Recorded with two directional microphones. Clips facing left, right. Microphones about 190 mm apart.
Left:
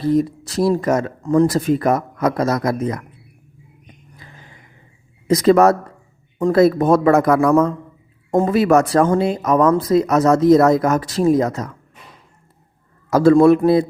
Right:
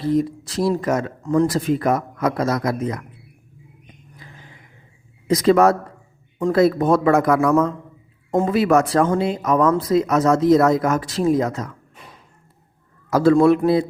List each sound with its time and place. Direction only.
0.1 s speech: 45° left (ahead or behind)
5.3 s a man's voice: 45° left (ahead or behind)
13.1 s a man's voice: 40° left (ahead or behind)